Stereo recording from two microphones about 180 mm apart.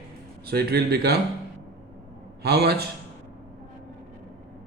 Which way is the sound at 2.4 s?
65° right (ahead or behind).